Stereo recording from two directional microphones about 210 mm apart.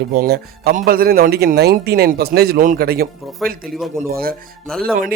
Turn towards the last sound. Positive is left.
turn(degrees=0)  # may be behind; listen again after turning